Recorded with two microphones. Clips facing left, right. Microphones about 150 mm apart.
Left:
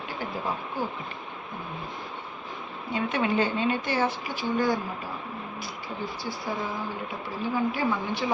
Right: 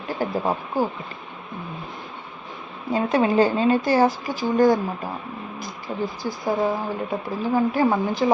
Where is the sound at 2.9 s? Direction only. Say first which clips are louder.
Right 7 dB; 35° right (ahead or behind).